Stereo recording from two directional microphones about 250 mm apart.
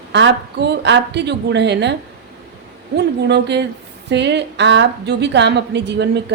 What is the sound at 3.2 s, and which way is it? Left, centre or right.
A woman's voice, right.